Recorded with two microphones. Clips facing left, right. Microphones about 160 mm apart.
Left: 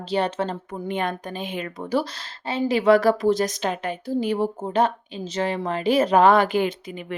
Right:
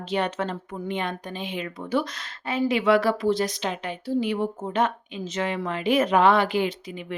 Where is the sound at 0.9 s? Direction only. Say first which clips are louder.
Left 3 dB; 50° left (ahead or behind).